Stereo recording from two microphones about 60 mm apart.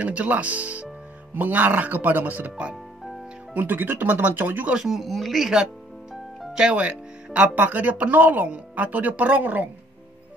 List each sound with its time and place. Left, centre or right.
0.0 s speech: right
3.5 s speech: right
4.7 s speech: centre
6.7 s speech: right